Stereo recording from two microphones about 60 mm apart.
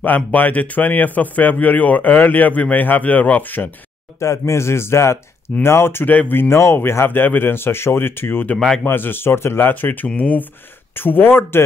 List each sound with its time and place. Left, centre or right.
0.0 s speech: left
4.2 s speech: left
6.5 s speech: left
8.5 s speech: centre
8.8 s speech: left
11.0 s speech: left